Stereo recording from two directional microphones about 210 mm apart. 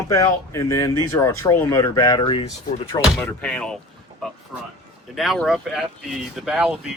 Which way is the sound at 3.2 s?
5° left (ahead or behind).